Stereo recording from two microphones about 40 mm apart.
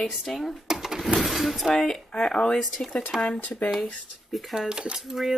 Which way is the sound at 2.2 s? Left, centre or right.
Centre.